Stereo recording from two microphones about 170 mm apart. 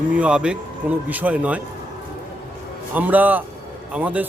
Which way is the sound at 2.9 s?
10° right (ahead or behind).